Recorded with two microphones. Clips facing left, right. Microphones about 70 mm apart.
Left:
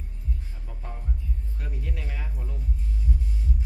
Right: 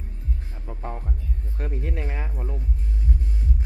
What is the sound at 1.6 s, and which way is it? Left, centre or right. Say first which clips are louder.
Music: right 9 dB; right.